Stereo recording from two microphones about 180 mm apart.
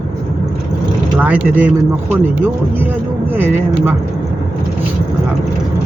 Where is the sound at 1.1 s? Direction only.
5° right (ahead or behind).